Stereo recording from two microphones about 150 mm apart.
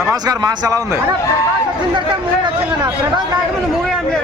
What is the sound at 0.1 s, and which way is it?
Speech, 25° right (ahead or behind).